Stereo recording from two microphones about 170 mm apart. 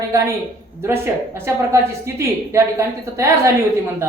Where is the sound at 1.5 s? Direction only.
15° right (ahead or behind).